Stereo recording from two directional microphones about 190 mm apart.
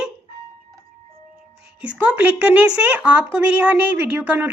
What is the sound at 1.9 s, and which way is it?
A woman's voice, 10° right (ahead or behind).